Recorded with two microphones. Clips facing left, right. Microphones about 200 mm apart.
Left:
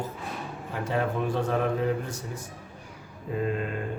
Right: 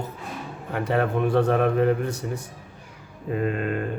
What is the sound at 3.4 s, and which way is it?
Speech, 65° right (ahead or behind).